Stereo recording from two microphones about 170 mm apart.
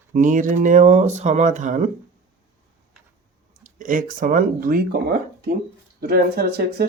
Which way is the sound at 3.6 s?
50° right (ahead or behind).